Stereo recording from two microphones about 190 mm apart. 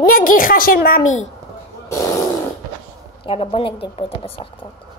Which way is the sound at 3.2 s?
30° left (ahead or behind).